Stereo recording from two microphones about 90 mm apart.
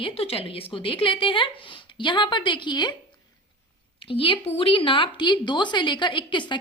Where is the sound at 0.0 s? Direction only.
90° left; by 2.9 s 55° left (ahead or behind).